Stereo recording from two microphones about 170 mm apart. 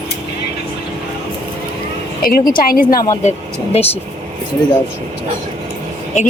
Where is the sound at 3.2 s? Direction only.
40° left (ahead or behind).